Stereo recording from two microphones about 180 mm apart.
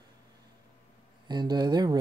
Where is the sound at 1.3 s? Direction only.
25° right (ahead or behind).